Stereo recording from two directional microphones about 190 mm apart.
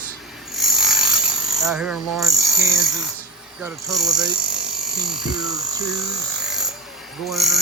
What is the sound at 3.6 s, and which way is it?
Speech, centre (ahead or behind).